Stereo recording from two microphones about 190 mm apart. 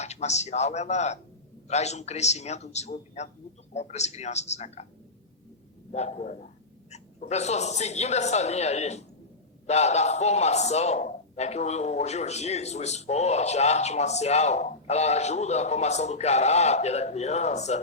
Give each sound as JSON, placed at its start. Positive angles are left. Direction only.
{"t": 0.0, "sound": "speech", "side_deg": 35}
{"t": 5.9, "sound": "speech", "side_deg": 35}